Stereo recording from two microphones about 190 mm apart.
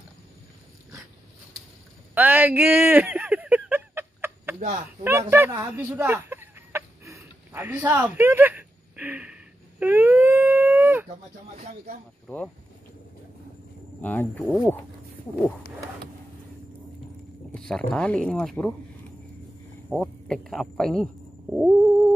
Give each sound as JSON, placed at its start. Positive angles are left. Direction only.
{"t": 2.1, "sound": "a sound", "side_deg": -10}
{"t": 5.0, "sound": "chicken", "side_deg": -15}
{"t": 11.6, "sound": "speech", "side_deg": -35}
{"t": 12.3, "sound": "speech", "side_deg": 10}
{"t": 14.0, "sound": "speech", "side_deg": 10}
{"t": 17.6, "sound": "speech", "side_deg": 5}
{"t": 19.9, "sound": "speech", "side_deg": 0}